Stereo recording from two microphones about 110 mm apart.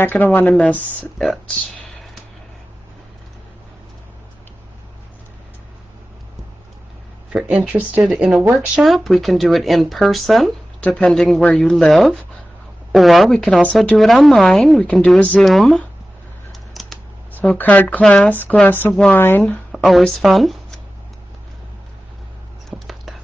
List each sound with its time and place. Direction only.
0.0 s speech: 15° left (ahead or behind)
1.1 s speech: centre (ahead or behind)
7.3 s speech: 10° right (ahead or behind)
16.8 s typing: centre (ahead or behind)
17.3 s speech: 15° left (ahead or behind)
19.7 s speech: centre (ahead or behind)
22.7 s a sound: centre (ahead or behind)